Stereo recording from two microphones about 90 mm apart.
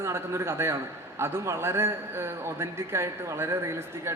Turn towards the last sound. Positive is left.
turn(degrees=-30)  # may be behind; listen again after turning